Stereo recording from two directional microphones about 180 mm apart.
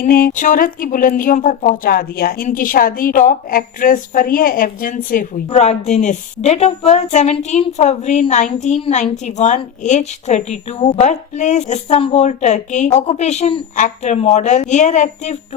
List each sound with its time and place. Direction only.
0.0 s a woman's voice: 55° left (ahead or behind)